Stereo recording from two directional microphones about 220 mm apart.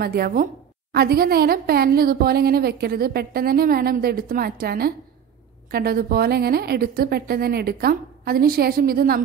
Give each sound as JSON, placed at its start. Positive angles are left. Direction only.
{"t": 0.0, "sound": "a woman's voice", "side_deg": -45}